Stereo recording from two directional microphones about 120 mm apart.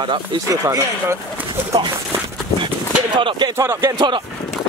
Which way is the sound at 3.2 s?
40° right (ahead or behind).